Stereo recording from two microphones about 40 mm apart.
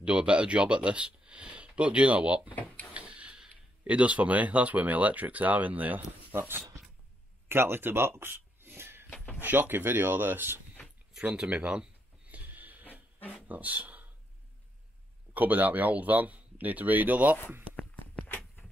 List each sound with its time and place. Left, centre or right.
0.0 s speech: right
7.4 s speech: right
8.2 s a sound: right
9.1 s a sound: left
9.4 s speech: right
11.3 s speech: right
12.3 s a sound: right
13.5 s speech: right
15.3 s speech: right